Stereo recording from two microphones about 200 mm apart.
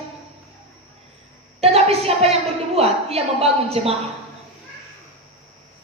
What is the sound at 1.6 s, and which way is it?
A woman's voice, 30° right (ahead or behind).